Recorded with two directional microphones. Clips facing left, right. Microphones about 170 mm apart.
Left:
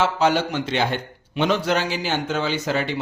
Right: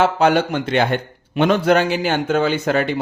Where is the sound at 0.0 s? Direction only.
55° right (ahead or behind).